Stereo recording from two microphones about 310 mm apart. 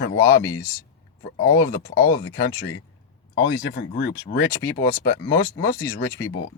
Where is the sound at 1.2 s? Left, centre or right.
Left.